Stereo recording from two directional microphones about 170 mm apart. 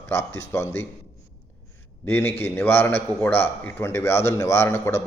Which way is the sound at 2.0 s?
10° left (ahead or behind).